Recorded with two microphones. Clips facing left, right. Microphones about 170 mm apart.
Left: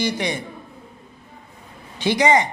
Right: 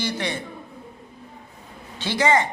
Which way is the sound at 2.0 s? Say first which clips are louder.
Left 3 dB; 15° left (ahead or behind).